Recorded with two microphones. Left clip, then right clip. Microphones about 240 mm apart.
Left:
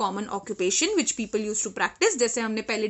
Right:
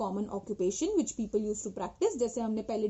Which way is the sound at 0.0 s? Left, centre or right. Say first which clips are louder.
Left 7 dB; left.